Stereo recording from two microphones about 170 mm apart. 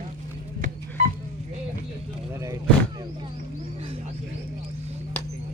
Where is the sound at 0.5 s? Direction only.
50° right (ahead or behind).